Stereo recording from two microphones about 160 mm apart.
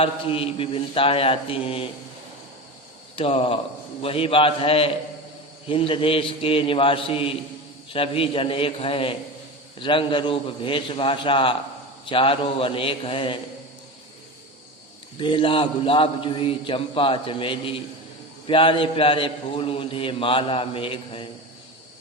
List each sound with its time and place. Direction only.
0.0 s a man's voice: 35° left (ahead or behind)
3.2 s a man's voice: 35° left (ahead or behind)
15.2 s a man's voice: 30° left (ahead or behind)